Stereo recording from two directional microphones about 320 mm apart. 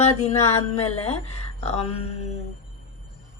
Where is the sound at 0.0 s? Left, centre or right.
Left.